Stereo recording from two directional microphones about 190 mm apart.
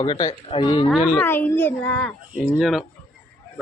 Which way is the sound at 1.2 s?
10° left (ahead or behind).